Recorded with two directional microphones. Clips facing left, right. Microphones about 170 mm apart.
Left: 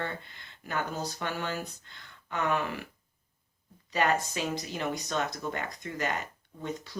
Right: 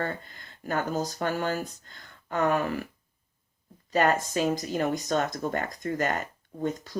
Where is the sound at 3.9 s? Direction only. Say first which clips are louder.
Right 4 dB; 45° right (ahead or behind).